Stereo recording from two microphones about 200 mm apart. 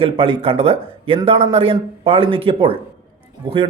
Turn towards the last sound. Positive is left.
turn(degrees=-25)  # may be behind; listen again after turning